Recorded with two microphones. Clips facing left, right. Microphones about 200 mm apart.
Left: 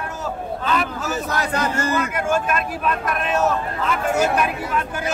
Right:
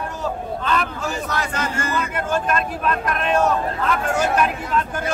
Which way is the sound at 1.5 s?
40° left (ahead or behind).